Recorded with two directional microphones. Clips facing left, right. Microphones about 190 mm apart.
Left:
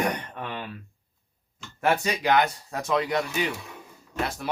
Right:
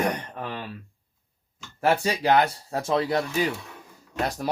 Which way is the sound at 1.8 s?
35° right (ahead or behind).